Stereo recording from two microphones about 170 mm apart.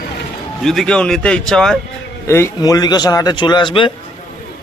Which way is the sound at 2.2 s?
15° left (ahead or behind).